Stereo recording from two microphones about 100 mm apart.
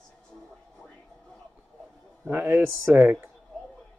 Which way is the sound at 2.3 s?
20° right (ahead or behind).